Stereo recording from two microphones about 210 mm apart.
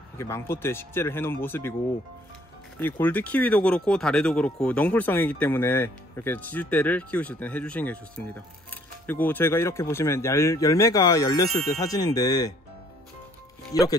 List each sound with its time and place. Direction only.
0.2 s speech: 10° left (ahead or behind)
2.8 s speech: 10° left (ahead or behind)
9.0 s speech: 10° left (ahead or behind)
13.7 s speech: 15° left (ahead or behind)